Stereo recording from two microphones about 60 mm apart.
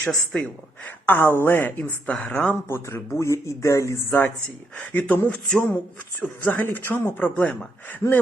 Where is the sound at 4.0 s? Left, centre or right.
Left.